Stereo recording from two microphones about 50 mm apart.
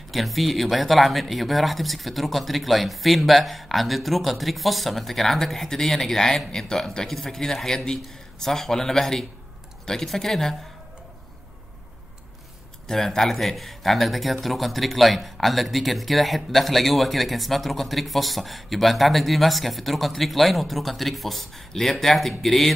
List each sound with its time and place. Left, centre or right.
0.1 s speech: centre
12.8 s speech: centre